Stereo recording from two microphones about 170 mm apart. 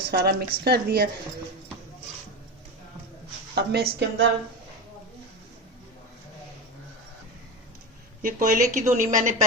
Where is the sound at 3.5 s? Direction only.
75° right (ahead or behind).